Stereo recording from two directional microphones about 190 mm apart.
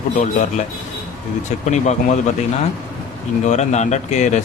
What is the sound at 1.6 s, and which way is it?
Speech, 35° left (ahead or behind).